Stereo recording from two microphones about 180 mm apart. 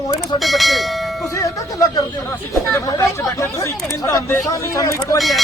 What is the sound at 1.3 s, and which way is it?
Speech, 20° left (ahead or behind).